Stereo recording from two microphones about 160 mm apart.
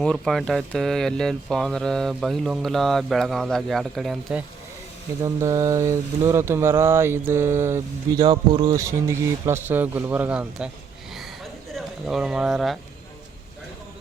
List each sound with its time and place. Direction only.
0.0 s speech: 5° left (ahead or behind)
5.2 s speech: 20° right (ahead or behind)
11.7 s speech: centre (ahead or behind)